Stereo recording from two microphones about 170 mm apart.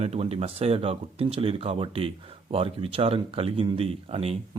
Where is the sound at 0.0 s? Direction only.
35° right (ahead or behind).